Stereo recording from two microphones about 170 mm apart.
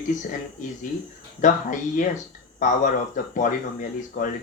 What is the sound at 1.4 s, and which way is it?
Speech, 50° left (ahead or behind).